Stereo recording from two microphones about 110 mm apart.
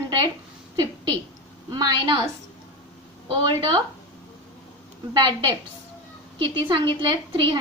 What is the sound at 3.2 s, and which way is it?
Speech, 50° right (ahead or behind).